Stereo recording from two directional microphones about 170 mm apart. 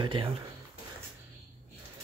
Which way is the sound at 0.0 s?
30° right (ahead or behind).